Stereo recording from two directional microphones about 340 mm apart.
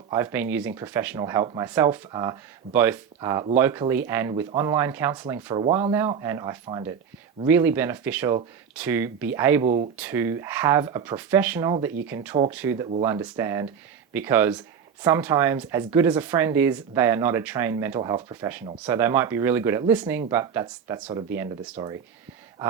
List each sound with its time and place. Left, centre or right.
0.1 s speech: centre
9.6 s speech: right
10.0 s speech: centre